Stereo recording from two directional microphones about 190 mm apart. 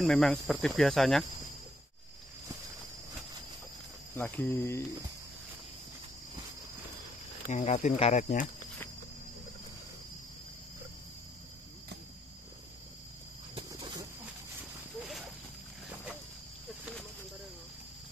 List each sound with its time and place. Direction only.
0.0 s speech: 5° left (ahead or behind)
4.1 s cricket: 10° left (ahead or behind)
7.4 s speech: 35° left (ahead or behind)
13.6 s a sound: 20° right (ahead or behind)